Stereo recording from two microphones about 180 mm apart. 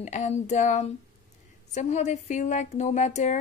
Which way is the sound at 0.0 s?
40° left (ahead or behind).